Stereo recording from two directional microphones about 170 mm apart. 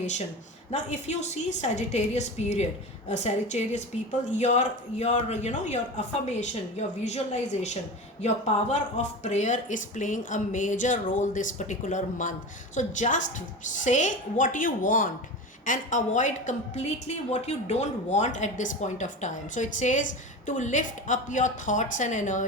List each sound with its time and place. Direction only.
0.7 s a woman's voice: 40° left (ahead or behind)
8.2 s a woman's voice: 45° left (ahead or behind)